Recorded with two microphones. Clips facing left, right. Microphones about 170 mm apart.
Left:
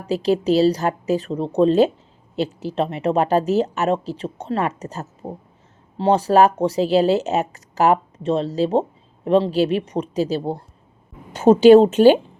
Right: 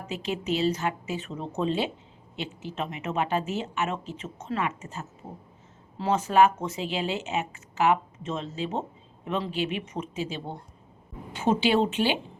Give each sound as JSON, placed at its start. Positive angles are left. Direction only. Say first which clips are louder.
{"t": 0.1, "sound": "speech", "louder": "left 12 dB", "side_deg": 35}
{"t": 5.2, "sound": "speech", "louder": "left 10 dB", "side_deg": 70}
{"t": 6.0, "sound": "a woman's voice", "louder": "left 6 dB", "side_deg": 35}